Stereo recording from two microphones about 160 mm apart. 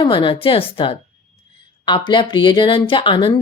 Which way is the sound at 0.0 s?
30° left (ahead or behind).